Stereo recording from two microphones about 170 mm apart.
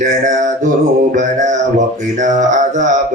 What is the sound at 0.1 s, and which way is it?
Speech, 45° right (ahead or behind).